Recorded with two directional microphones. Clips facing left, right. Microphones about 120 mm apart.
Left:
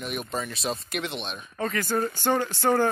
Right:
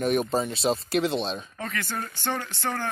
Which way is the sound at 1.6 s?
5° left (ahead or behind).